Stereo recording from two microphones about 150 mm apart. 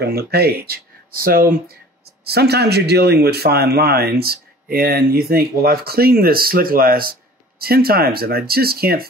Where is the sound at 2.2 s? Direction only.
90° right.